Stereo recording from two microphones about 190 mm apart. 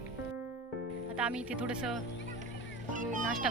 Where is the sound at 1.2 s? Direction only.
5° right (ahead or behind).